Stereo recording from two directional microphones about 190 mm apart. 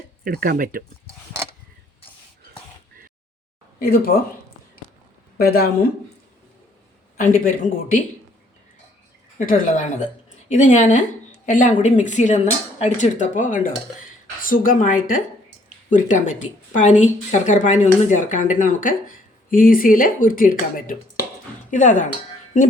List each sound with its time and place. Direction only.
0.3 s speech: 50° right (ahead or behind)
3.8 s speech: 50° left (ahead or behind)
5.4 s speech: 55° left (ahead or behind)
7.2 s speech: 50° left (ahead or behind)
9.4 s a woman's voice: 45° left (ahead or behind)